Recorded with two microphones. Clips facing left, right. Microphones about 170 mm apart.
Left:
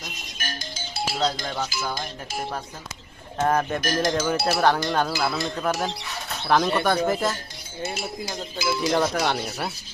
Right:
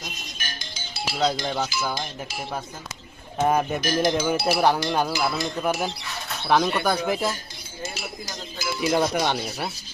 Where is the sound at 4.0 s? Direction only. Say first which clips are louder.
Right 2 dB; 25° right (ahead or behind).